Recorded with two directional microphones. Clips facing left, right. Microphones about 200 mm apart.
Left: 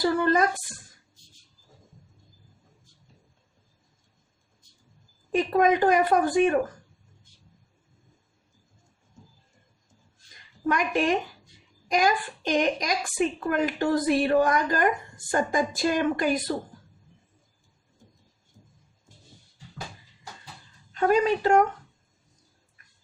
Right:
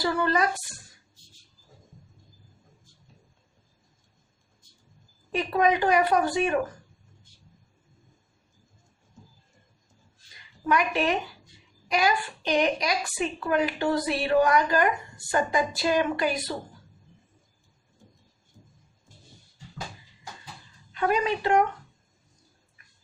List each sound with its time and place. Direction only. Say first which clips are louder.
0.0 s a woman's voice: left 3 dB; 50° left (ahead or behind)
5.3 s a woman's voice: left 2 dB; 45° left (ahead or behind)
10.7 s a woman's voice: left 1 dB; 45° left (ahead or behind)
20.9 s a woman's voice: left 4 dB; 45° left (ahead or behind)